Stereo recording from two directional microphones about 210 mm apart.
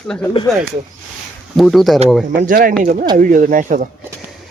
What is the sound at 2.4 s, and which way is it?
Speech, 40° right (ahead or behind).